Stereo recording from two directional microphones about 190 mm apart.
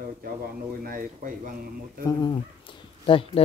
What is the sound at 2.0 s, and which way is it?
Speech, 25° left (ahead or behind).